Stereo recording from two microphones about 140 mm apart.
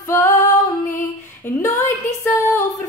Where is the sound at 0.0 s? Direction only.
20° left (ahead or behind).